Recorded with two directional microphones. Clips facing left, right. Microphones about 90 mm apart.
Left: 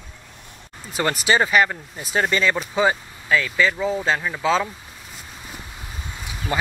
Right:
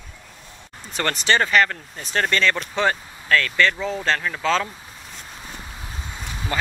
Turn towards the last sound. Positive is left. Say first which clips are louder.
# left 1 dB
turn(degrees=15)  # may be behind; listen again after turning